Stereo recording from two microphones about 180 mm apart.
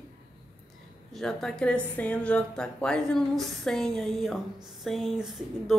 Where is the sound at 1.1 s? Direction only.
Centre (ahead or behind).